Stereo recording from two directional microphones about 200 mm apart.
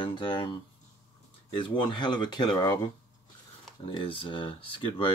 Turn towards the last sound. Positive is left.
turn(degrees=25)  # may be behind; listen again after turning